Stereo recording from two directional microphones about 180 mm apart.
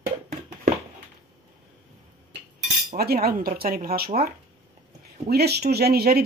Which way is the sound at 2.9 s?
60° right (ahead or behind).